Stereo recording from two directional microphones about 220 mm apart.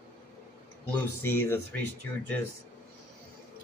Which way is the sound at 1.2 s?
10° left (ahead or behind).